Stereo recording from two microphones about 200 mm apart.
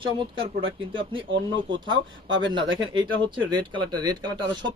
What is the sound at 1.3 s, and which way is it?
A man's voice, 65° right (ahead or behind).